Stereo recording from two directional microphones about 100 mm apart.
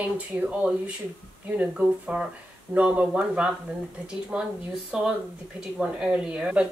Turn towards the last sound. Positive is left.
turn(degrees=-10)  # may be behind; listen again after turning